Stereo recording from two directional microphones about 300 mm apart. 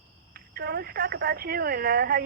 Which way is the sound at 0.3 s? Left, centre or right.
Right.